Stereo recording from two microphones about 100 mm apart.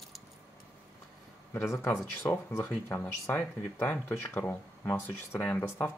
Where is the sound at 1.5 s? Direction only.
25° left (ahead or behind).